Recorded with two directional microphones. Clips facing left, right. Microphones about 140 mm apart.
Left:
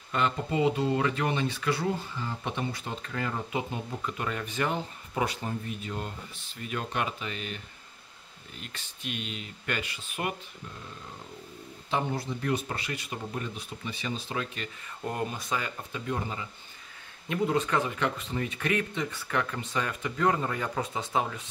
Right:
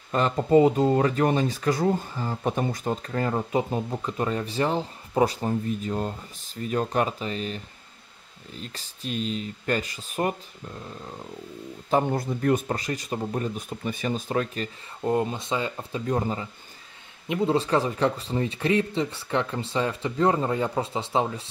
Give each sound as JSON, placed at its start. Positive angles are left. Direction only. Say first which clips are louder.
{"t": 0.1, "sound": "speech", "louder": "right 9 dB", "side_deg": -40}
{"t": 11.9, "sound": "speech", "louder": "right 7 dB", "side_deg": -45}
{"t": 15.0, "sound": "speech", "louder": "right 8 dB", "side_deg": -25}
{"t": 16.1, "sound": "speech", "louder": "right 7 dB", "side_deg": -35}
{"t": 17.3, "sound": "speech", "louder": "right 4 dB", "side_deg": -25}